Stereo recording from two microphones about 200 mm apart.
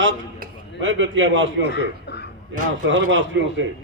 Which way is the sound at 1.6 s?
55° left (ahead or behind).